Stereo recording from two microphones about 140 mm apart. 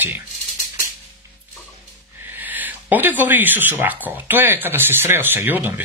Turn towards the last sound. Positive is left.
turn(degrees=-15)  # may be behind; listen again after turning